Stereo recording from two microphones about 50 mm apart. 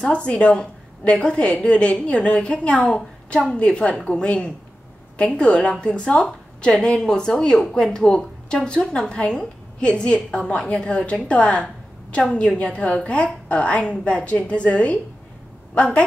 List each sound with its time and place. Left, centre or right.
0.0 s a woman's voice: left